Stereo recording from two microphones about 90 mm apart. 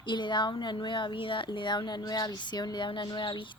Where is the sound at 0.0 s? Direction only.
60° left (ahead or behind).